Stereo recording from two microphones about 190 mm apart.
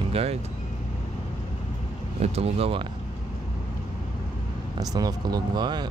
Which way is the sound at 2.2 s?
30° right (ahead or behind).